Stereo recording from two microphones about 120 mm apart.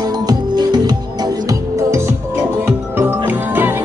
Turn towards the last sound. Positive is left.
turn(degrees=-15)  # may be behind; listen again after turning